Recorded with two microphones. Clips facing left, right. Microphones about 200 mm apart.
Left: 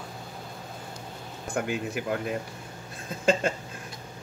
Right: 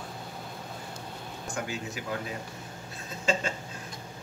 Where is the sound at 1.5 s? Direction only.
55° left (ahead or behind).